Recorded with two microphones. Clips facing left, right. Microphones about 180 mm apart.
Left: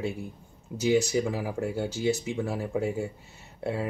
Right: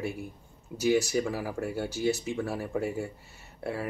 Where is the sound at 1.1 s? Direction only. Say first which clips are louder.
Left 2 dB; 15° left (ahead or behind).